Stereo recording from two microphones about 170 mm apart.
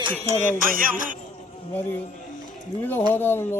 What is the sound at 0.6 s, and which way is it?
Music, 55° right (ahead or behind).